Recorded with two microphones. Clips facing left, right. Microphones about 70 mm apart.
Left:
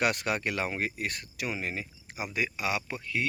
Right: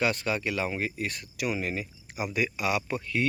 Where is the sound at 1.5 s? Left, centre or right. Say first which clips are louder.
Right 3 dB; left.